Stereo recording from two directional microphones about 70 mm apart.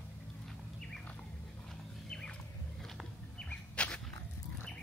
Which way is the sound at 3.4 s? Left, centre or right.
Centre.